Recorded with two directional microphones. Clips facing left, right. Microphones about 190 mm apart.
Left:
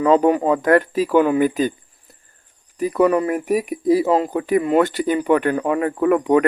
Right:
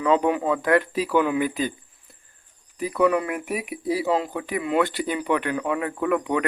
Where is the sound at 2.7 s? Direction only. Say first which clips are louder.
Left 4 dB; 40° left (ahead or behind).